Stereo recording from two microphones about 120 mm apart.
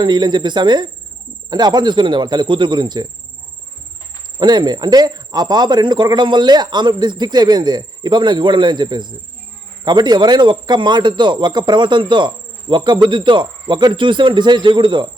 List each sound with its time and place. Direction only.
0.0 s speech: 40° right (ahead or behind)
4.4 s speech: 35° right (ahead or behind)